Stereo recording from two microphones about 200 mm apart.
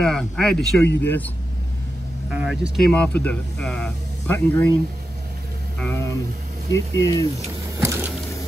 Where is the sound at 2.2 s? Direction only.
5° right (ahead or behind).